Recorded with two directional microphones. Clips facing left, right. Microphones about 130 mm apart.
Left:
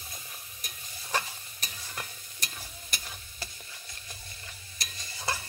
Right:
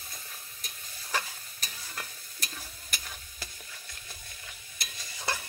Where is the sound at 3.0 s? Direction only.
10° left (ahead or behind).